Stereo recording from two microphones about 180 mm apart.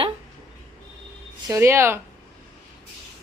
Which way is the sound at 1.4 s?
15° right (ahead or behind).